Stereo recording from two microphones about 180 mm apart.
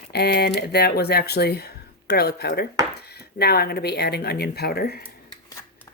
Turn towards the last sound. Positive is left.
turn(degrees=60)  # may be behind; listen again after turning